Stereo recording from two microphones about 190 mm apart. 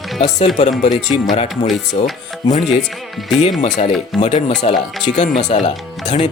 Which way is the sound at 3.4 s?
40° left (ahead or behind).